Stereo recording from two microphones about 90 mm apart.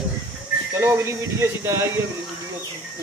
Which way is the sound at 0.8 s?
25° right (ahead or behind).